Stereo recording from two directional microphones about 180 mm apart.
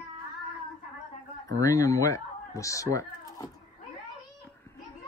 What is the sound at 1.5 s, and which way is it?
Speech, 20° left (ahead or behind).